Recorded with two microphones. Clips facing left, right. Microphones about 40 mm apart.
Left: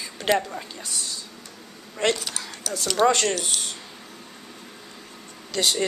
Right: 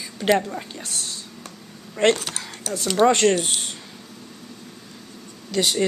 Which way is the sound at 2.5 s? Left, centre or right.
Right.